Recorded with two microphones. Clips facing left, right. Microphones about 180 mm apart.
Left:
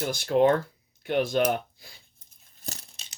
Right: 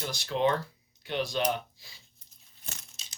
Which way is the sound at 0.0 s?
50° left (ahead or behind).